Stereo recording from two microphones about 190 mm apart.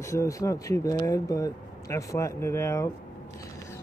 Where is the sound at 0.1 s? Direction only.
15° left (ahead or behind).